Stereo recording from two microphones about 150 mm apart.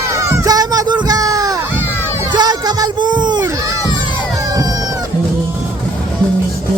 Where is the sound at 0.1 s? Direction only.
20° right (ahead or behind).